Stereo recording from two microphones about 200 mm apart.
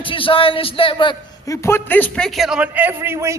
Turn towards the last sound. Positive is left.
turn(degrees=-15)  # may be behind; listen again after turning